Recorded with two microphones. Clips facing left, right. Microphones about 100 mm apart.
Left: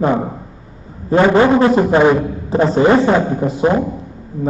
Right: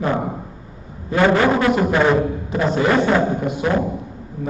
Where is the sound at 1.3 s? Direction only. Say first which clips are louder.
Left 5 dB; 30° left (ahead or behind).